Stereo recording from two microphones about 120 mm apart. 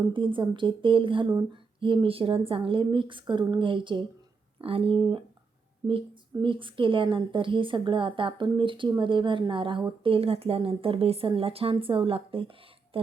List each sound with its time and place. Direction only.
0.1 s a woman's voice: 45° right (ahead or behind)
6.4 s a woman's voice: 45° right (ahead or behind)